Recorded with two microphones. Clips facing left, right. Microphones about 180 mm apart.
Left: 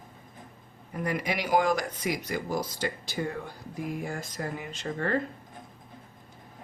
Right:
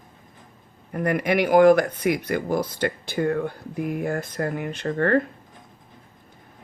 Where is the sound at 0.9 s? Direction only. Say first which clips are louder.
Right 8 dB; 60° right (ahead or behind).